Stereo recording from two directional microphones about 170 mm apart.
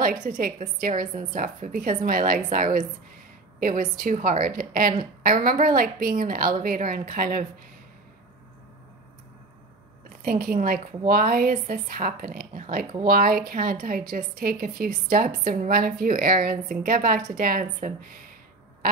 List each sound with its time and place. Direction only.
0.0 s a woman's voice: 55° right (ahead or behind)
10.0 s a woman's voice: 55° right (ahead or behind)